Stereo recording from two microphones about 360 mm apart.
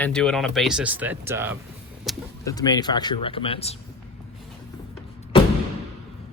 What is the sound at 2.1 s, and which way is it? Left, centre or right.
Speech, centre.